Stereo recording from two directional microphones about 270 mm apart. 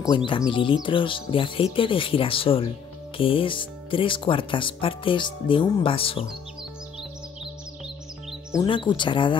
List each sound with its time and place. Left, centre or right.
0.0 s speech: centre
8.3 s music: centre
8.6 s speech: centre